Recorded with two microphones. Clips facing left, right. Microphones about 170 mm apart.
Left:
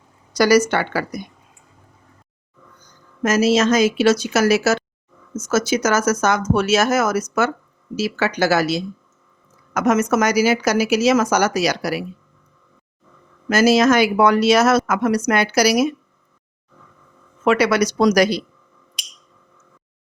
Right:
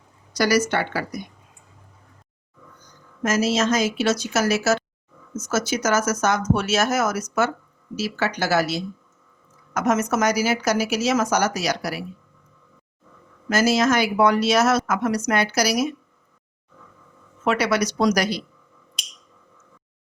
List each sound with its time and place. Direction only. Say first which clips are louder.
0.3 s speech: left 5 dB; 85° left
3.2 s a woman's voice: left 5 dB; 85° left
5.5 s speech: left 4 dB; 90° left
13.5 s speech: left 5 dB; 80° left
17.4 s speech: left 5 dB; 90° left